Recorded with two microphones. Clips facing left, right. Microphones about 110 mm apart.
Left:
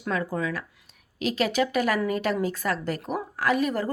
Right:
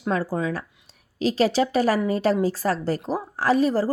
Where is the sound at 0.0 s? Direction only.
35° right (ahead or behind).